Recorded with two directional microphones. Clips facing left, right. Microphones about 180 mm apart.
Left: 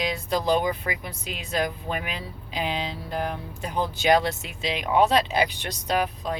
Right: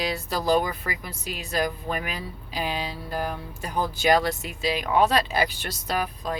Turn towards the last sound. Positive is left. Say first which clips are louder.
# left 3 dB
turn(degrees=20)  # may be behind; listen again after turning